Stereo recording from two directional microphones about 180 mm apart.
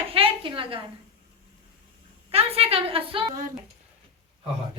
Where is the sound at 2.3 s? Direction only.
35° right (ahead or behind).